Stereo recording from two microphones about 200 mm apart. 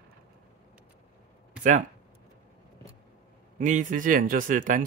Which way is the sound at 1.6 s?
35° right (ahead or behind).